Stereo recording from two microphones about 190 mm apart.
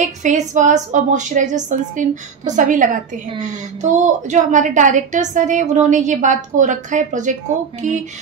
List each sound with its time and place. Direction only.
0.0 s a woman's voice: 40° right (ahead or behind)